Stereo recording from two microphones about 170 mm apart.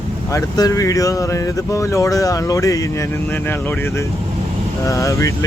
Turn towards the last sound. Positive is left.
turn(degrees=20)  # may be behind; listen again after turning